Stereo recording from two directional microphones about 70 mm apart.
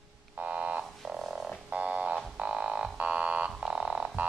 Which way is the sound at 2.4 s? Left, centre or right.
Centre.